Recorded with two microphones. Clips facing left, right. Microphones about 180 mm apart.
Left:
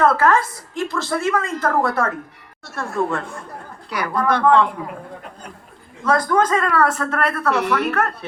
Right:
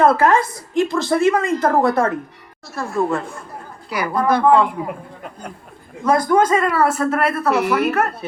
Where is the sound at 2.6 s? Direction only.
Centre (ahead or behind).